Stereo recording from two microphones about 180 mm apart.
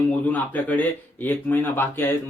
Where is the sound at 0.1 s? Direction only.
10° left (ahead or behind).